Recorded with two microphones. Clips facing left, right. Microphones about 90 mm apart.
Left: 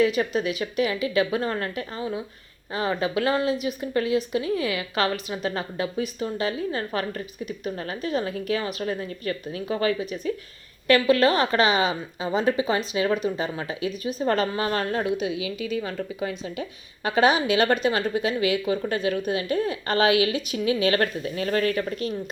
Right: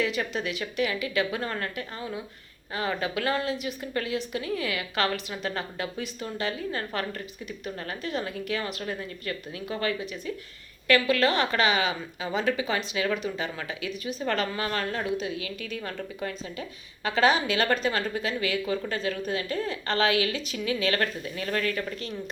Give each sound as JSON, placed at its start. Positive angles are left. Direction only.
{"t": 0.2, "sound": "a woman's voice", "side_deg": 30}
{"t": 15.4, "sound": "a woman's voice", "side_deg": 10}
{"t": 16.6, "sound": "a woman's voice", "side_deg": 15}
{"t": 21.0, "sound": "speech", "side_deg": 35}